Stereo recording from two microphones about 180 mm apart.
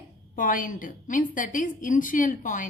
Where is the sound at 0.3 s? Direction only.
50° left (ahead or behind).